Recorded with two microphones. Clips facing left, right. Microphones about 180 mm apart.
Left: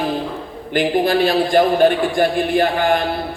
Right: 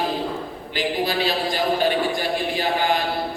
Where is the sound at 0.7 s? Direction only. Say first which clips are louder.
Left 8 dB; 50° left (ahead or behind).